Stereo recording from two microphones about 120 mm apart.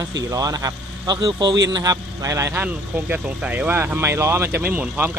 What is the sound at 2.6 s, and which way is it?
Speech, 10° right (ahead or behind).